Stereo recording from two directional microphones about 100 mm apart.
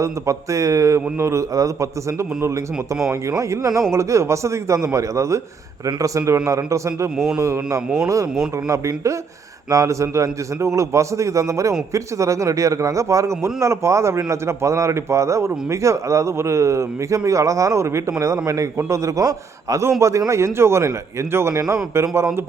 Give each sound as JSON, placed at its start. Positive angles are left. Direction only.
{"t": 0.0, "sound": "a man's voice", "side_deg": -30}
{"t": 7.8, "sound": "speech", "side_deg": -10}
{"t": 8.0, "sound": "a man's voice", "side_deg": -35}